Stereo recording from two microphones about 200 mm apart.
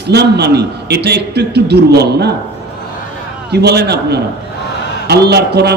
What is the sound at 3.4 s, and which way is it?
A man's voice, 55° right (ahead or behind).